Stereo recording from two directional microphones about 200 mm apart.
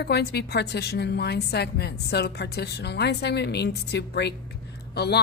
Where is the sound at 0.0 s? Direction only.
55° left (ahead or behind).